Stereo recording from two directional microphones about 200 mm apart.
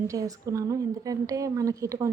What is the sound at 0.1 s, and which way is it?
A woman's voice, 15° right (ahead or behind).